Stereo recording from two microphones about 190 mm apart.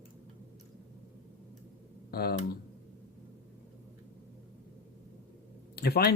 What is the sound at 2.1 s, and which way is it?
Speech, 55° left (ahead or behind).